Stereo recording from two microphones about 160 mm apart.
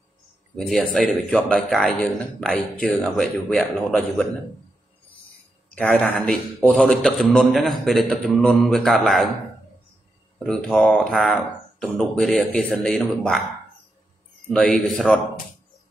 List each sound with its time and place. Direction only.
0.6 s a man's voice: centre (ahead or behind)
5.8 s a man's voice: 10° left (ahead or behind)
10.4 s a man's voice: 5° left (ahead or behind)
14.5 s a man's voice: 5° left (ahead or behind)